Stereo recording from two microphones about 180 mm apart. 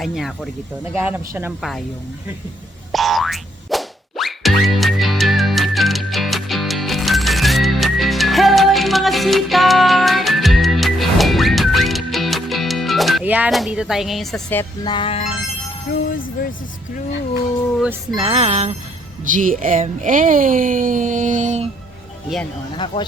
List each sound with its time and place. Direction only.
0.0 s speech: centre (ahead or behind)
0.9 s speech: 15° right (ahead or behind)
2.9 s music: centre (ahead or behind)
14.8 s music: 30° left (ahead or behind)
16.0 s speech: 50° left (ahead or behind)
18.1 s speech: 30° right (ahead or behind)